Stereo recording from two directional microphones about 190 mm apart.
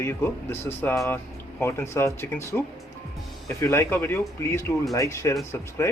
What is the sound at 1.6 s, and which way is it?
Speech, 15° left (ahead or behind).